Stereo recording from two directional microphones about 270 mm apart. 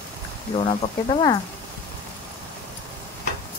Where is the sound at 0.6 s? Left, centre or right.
Centre.